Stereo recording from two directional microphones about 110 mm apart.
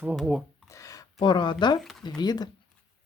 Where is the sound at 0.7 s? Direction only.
30° left (ahead or behind).